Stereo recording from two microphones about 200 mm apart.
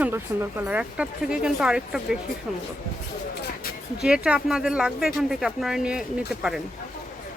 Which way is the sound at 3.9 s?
5° right (ahead or behind).